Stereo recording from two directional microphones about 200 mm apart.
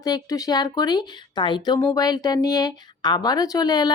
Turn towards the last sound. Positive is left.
turn(degrees=20)  # may be behind; listen again after turning